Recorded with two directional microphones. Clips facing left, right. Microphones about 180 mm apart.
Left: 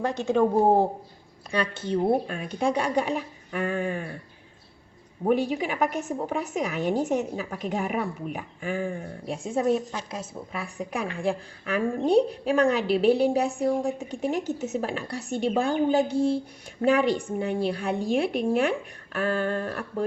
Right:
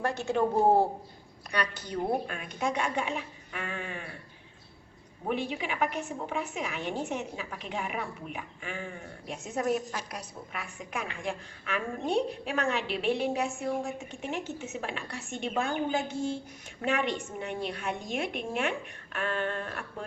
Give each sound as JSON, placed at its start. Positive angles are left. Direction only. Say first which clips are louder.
{"t": 0.0, "sound": "speech", "louder": "left 5 dB", "side_deg": 20}
{"t": 1.5, "sound": "speech", "louder": "left 6 dB", "side_deg": 30}
{"t": 5.2, "sound": "speech", "louder": "left 8 dB", "side_deg": 40}